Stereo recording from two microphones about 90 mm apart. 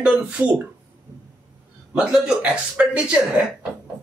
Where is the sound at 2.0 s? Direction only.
5° right (ahead or behind).